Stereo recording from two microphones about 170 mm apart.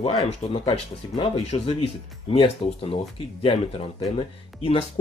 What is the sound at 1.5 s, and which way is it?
Speech, 40° left (ahead or behind).